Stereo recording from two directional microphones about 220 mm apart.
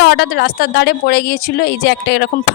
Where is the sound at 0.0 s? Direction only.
50° left (ahead or behind).